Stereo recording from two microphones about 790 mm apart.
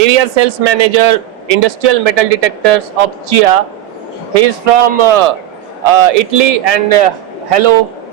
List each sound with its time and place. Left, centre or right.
0.0 s a man's voice: right